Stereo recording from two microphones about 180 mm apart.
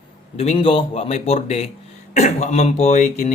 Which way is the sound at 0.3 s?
30° left (ahead or behind).